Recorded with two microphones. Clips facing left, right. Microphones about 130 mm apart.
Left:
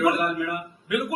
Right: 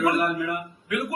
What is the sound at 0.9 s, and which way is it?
Speech, 20° left (ahead or behind).